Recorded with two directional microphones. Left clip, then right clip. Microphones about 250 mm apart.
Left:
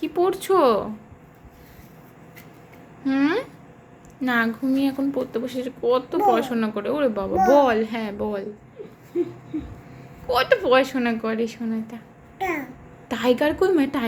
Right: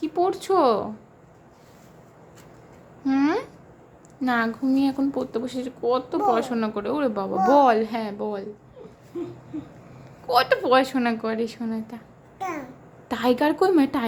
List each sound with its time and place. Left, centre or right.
0.0 s a woman's voice: centre
3.0 s a woman's voice: centre
10.2 s a woman's voice: centre
12.4 s babbling: centre
13.1 s a woman's voice: centre